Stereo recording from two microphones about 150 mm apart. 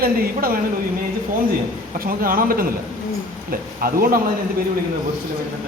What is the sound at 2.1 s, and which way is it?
Speech, 70° right (ahead or behind).